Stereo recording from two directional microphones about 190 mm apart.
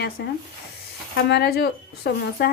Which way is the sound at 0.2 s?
60° left (ahead or behind).